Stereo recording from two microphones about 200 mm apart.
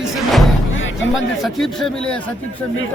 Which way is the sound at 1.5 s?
Centre (ahead or behind).